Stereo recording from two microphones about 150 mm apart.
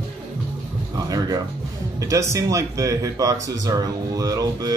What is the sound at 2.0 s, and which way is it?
Speech, 20° right (ahead or behind).